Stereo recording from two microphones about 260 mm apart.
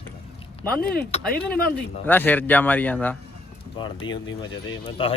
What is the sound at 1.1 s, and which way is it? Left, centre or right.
Speech, left.